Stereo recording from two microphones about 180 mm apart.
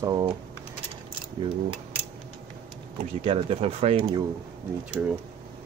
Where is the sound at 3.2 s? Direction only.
30° right (ahead or behind).